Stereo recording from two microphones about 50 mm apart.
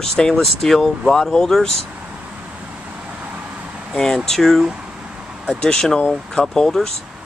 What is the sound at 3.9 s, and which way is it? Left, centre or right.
Speech, centre.